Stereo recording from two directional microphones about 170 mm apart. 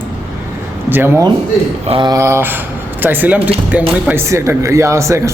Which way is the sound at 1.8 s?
30° right (ahead or behind).